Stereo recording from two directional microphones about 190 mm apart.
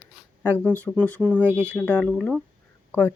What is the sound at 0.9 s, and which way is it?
Speech, 15° right (ahead or behind).